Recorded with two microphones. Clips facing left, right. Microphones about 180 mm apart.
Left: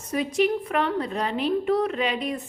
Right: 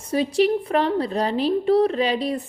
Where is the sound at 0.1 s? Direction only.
30° right (ahead or behind).